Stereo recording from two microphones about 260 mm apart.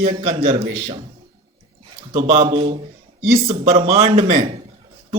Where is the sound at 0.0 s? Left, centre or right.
Right.